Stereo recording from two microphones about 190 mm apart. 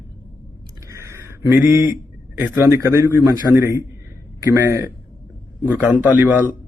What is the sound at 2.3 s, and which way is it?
A man's voice, 10° right (ahead or behind).